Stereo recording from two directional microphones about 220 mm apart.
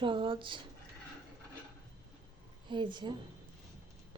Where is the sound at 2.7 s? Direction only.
20° right (ahead or behind).